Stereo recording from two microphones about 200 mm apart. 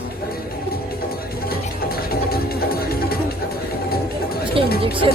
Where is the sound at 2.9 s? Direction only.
50° left (ahead or behind).